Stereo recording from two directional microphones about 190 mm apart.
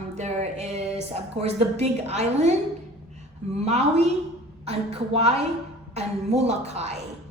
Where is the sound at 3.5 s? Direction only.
35° right (ahead or behind).